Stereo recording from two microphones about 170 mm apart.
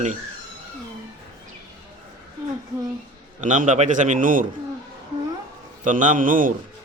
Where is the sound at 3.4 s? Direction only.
45° right (ahead or behind).